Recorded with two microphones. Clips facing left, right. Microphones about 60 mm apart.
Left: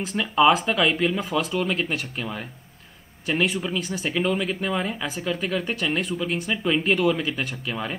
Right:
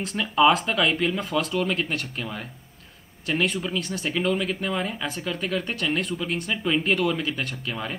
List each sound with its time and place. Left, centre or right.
0.0 s speech: centre